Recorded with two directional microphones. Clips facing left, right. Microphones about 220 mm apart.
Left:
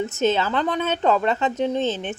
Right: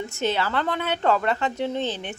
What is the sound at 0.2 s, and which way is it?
A woman's voice, 20° left (ahead or behind).